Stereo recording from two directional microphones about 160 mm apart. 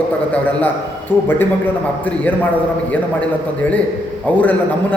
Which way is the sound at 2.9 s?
10° left (ahead or behind).